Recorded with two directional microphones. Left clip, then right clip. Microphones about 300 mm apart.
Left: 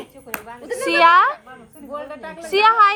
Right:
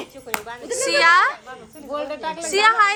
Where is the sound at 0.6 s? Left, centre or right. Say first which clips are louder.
Left 2 dB; centre.